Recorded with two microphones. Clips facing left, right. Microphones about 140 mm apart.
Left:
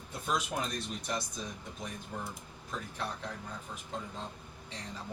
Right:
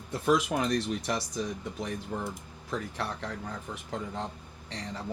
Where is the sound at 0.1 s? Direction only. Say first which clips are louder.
Right 8 dB; 90° right.